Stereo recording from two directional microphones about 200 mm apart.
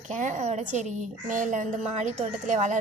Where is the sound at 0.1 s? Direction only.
35° right (ahead or behind).